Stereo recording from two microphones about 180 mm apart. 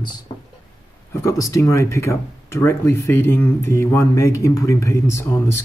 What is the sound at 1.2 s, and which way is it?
Speech, 15° left (ahead or behind).